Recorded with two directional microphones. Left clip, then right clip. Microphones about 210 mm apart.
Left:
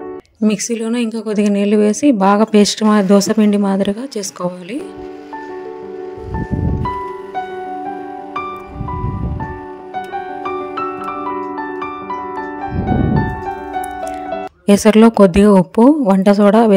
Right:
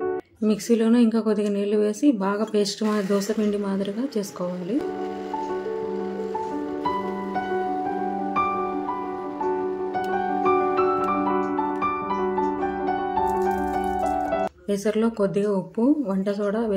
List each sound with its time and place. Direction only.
0.4 s speech: 35° left (ahead or behind)
14.7 s speech: 45° left (ahead or behind)